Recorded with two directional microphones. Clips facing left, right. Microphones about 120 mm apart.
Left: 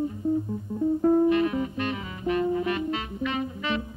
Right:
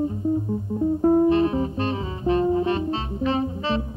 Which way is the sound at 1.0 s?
30° right (ahead or behind).